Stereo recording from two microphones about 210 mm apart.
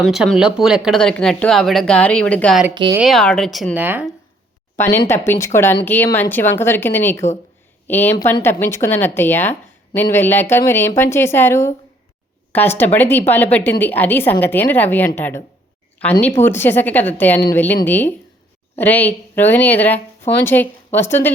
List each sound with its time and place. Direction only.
0.0 s speech: centre (ahead or behind)
2.7 s speech: 20° right (ahead or behind)
3.0 s speech: centre (ahead or behind)
4.8 s a woman's voice: 10° left (ahead or behind)